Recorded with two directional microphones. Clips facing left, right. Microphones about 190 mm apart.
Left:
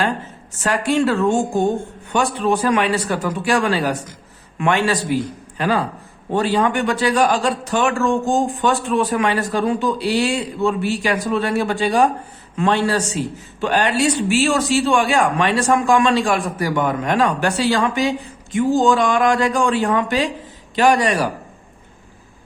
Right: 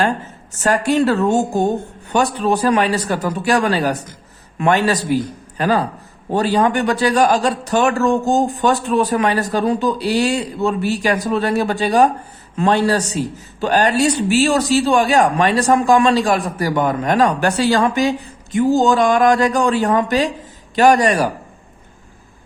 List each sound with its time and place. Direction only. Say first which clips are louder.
0.6 s speech: right 2 dB; 40° right (ahead or behind)